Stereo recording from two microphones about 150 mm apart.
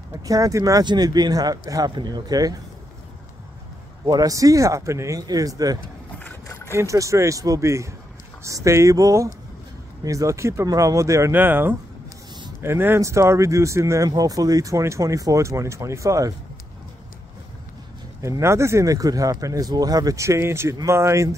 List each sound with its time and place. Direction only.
0.1 s speech: 20° right (ahead or behind)
4.0 s speech: 25° right (ahead or behind)
6.4 s vehicle: 20° left (ahead or behind)
6.8 s speech: 20° right (ahead or behind)
18.2 s speech: 20° right (ahead or behind)